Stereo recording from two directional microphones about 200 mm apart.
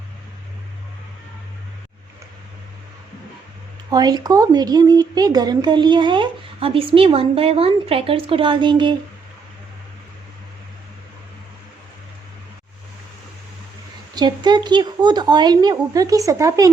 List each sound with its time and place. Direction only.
3.8 s speech: 20° right (ahead or behind)
14.2 s speech: 20° right (ahead or behind)